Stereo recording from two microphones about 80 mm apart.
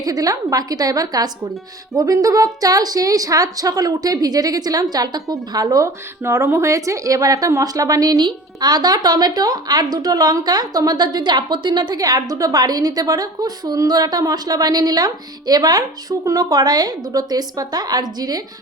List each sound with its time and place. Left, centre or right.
0.0 s a woman's voice: right